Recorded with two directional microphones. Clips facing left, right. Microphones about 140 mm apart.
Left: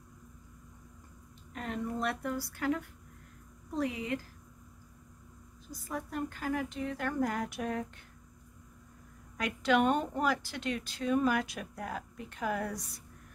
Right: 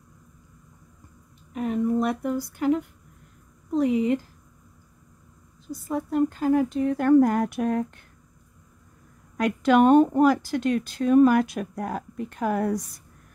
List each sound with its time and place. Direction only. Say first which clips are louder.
1.5 s speech: right 12 dB; 10° right (ahead or behind)
5.7 s speech: right 11 dB; 25° right (ahead or behind); by 7.8 s 50° right (ahead or behind)
9.4 s speech: right 9 dB; 45° right (ahead or behind)